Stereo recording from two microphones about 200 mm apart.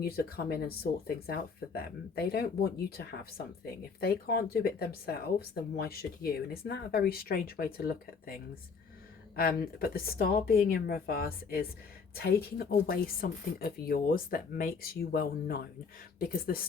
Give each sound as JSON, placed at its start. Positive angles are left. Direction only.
{"t": 0.0, "sound": "speech", "side_deg": 50}
{"t": 9.3, "sound": "speech", "side_deg": 45}